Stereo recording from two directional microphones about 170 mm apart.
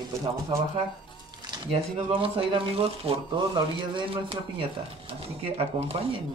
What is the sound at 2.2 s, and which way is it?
Speech, 30° right (ahead or behind).